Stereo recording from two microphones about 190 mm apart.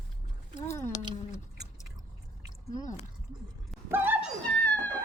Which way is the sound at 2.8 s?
40° left (ahead or behind).